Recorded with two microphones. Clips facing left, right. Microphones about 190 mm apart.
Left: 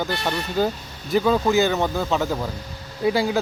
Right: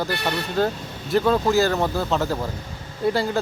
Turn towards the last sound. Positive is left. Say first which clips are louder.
# left 1 dB
turn(degrees=5)  # may be behind; listen again after turning